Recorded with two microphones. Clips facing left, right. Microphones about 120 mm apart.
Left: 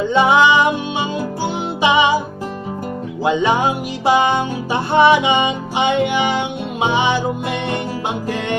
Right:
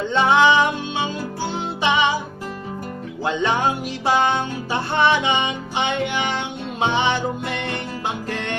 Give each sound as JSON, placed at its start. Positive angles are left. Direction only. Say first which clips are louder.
{"t": 0.1, "sound": "music", "louder": "left 2 dB", "side_deg": 10}
{"t": 3.2, "sound": "music", "louder": "left 4 dB", "side_deg": 10}